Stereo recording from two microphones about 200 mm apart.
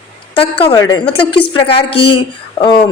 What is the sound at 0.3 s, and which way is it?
A woman's voice, 30° left (ahead or behind).